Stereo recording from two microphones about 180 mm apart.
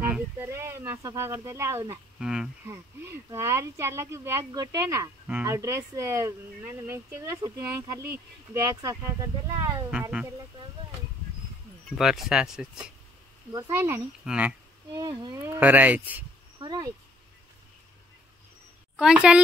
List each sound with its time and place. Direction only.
0.0 s a sound: 10° right (ahead or behind)
2.1 s speech: 5° right (ahead or behind)
2.7 s speech: 15° right (ahead or behind)
12.0 s speech: centre (ahead or behind)
13.5 s speech: 15° right (ahead or behind)
15.0 s speech: 25° right (ahead or behind)
16.5 s speech: 20° right (ahead or behind)
18.9 s speech: 5° right (ahead or behind)